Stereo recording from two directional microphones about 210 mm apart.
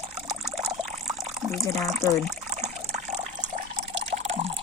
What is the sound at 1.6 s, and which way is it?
Speech, centre (ahead or behind).